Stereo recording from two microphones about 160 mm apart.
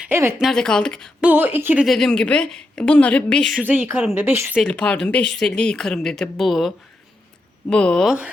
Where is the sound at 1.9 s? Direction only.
5° left (ahead or behind).